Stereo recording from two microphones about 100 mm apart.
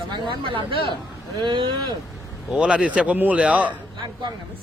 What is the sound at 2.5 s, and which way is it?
Speech, 10° right (ahead or behind).